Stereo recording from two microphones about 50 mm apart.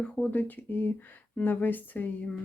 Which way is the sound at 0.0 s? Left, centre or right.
Left.